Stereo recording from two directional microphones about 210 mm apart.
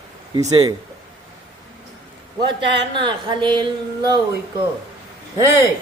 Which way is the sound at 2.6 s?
55° right (ahead or behind).